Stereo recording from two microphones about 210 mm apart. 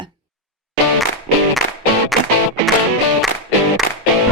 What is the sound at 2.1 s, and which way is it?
Music, centre (ahead or behind).